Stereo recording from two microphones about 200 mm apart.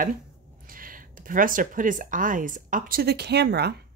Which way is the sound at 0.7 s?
45° right (ahead or behind).